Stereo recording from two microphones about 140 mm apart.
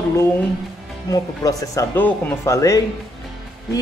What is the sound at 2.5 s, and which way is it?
Speech, 25° left (ahead or behind).